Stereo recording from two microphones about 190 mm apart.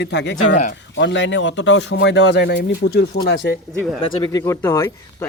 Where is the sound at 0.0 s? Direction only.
65° left (ahead or behind).